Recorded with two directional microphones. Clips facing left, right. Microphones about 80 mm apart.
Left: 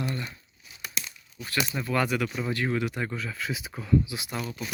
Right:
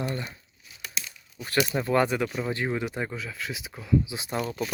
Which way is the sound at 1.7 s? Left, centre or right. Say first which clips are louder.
Right 2 dB; right.